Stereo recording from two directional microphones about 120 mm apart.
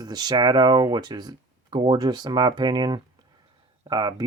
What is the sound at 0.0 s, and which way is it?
Speech, 35° right (ahead or behind).